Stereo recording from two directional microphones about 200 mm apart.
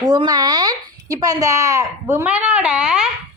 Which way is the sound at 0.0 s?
20° right (ahead or behind).